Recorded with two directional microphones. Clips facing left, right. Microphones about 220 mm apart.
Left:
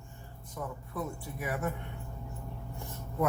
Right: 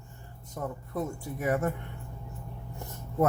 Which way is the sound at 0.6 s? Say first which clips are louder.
Right 4 dB; 45° right (ahead or behind).